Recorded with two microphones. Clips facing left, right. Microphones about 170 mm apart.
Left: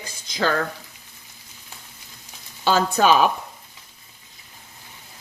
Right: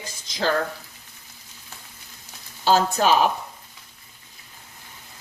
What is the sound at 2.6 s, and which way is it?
Speech, 60° left (ahead or behind).